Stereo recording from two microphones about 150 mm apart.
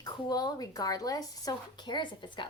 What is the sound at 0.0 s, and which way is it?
Speech, 25° left (ahead or behind).